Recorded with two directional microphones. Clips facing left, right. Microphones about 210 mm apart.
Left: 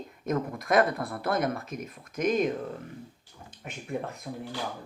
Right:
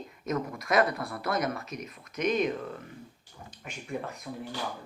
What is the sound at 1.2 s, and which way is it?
Speech, 50° left (ahead or behind).